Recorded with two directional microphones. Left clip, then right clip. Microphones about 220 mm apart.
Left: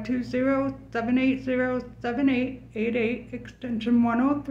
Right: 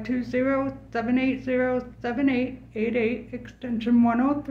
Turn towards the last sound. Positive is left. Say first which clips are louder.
# right 1 dB
turn(degrees=-5)  # may be behind; listen again after turning